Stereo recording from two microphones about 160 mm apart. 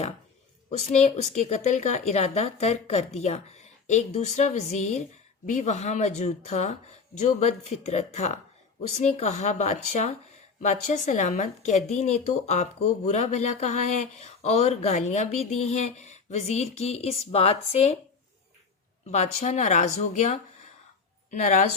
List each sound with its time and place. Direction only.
0.9 s a woman's voice: 45° left (ahead or behind)
19.0 s a woman's voice: 45° left (ahead or behind)